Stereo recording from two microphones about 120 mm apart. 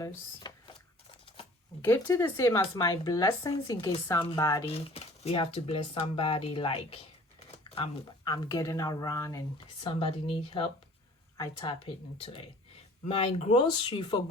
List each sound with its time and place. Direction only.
0.0 s speech: 35° left (ahead or behind)
1.8 s speech: 20° left (ahead or behind)
4.6 s speech: 55° left (ahead or behind)
7.6 s speech: 40° left (ahead or behind)
9.8 s speech: 45° left (ahead or behind)
13.1 s speech: 55° left (ahead or behind)
13.7 s speech: 35° left (ahead or behind)